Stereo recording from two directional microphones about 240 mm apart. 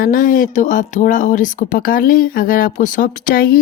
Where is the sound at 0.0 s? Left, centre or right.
Left.